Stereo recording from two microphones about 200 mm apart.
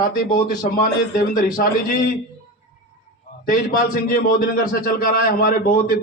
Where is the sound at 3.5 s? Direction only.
45° left (ahead or behind).